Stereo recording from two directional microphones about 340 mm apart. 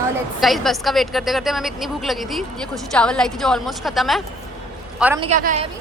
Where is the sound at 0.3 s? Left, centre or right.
Centre.